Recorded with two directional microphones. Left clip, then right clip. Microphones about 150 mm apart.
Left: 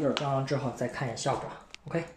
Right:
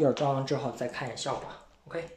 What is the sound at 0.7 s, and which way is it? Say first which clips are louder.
Speech: left 1 dB; centre (ahead or behind).